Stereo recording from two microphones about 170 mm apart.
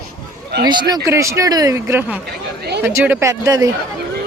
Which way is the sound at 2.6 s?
75° right (ahead or behind).